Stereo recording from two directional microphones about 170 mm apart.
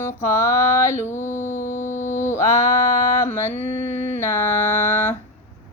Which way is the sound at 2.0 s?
45° left (ahead or behind).